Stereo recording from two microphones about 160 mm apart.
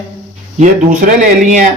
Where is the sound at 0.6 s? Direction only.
50° right (ahead or behind).